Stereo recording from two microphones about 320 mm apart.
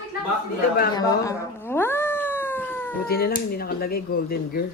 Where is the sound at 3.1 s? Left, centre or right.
Left.